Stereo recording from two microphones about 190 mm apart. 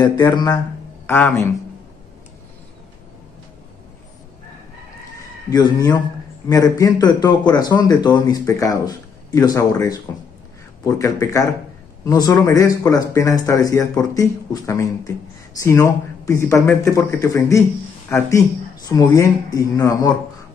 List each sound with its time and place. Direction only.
0.2 s speech: 20° left (ahead or behind)
5.5 s a man's voice: 20° left (ahead or behind)
18.9 s speech: 20° left (ahead or behind)